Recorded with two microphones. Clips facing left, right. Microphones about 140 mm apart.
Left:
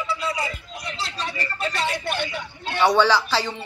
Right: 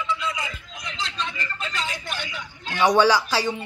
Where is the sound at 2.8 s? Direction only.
15° right (ahead or behind).